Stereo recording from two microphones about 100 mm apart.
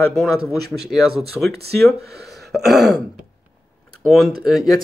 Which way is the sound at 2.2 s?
Centre (ahead or behind).